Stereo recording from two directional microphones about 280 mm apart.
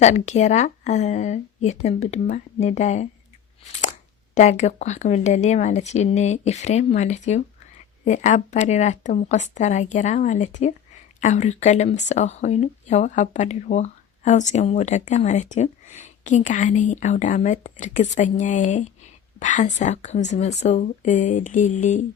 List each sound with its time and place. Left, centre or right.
0.0 s speech: left
3.6 s a sound: left
4.4 s speech: left